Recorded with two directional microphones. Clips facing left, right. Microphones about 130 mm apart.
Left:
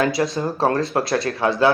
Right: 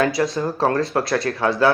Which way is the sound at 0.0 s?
25° left (ahead or behind).